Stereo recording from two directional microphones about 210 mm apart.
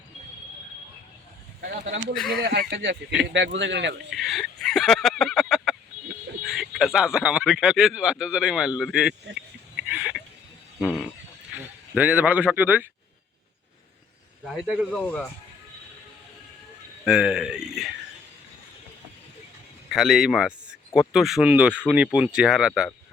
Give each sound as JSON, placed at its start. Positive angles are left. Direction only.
{"t": 1.6, "sound": "speech", "side_deg": -50}
{"t": 2.1, "sound": "speech", "side_deg": 5}
{"t": 2.4, "sound": "a man's voice", "side_deg": -50}
{"t": 4.1, "sound": "fowl", "side_deg": 0}
{"t": 6.4, "sound": "speech", "side_deg": 0}
{"t": 9.3, "sound": "a sound", "side_deg": -5}
{"t": 10.8, "sound": "speech", "side_deg": 0}
{"t": 14.4, "sound": "speech", "side_deg": 0}
{"t": 17.1, "sound": "speech", "side_deg": -5}
{"t": 19.9, "sound": "speech", "side_deg": 0}